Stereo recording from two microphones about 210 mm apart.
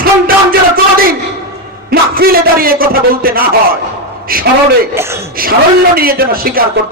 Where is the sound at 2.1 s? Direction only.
45° right (ahead or behind).